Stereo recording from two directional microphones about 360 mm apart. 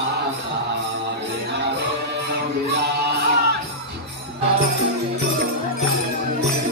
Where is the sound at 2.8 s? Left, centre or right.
Right.